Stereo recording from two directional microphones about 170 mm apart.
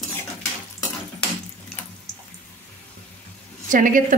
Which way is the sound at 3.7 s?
50° right (ahead or behind).